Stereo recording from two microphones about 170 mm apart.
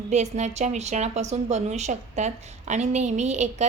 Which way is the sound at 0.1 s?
40° right (ahead or behind).